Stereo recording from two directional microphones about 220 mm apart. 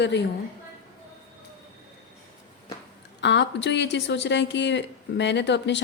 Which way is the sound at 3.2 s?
55° left (ahead or behind).